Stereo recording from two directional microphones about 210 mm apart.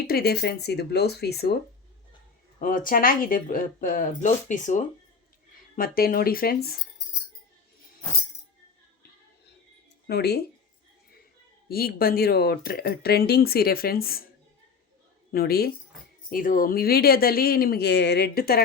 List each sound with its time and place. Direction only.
0.1 s speech: 50° left (ahead or behind)
2.6 s speech: 40° left (ahead or behind)
10.1 s speech: 50° left (ahead or behind)
11.7 s speech: 45° left (ahead or behind)
15.3 s speech: 45° left (ahead or behind)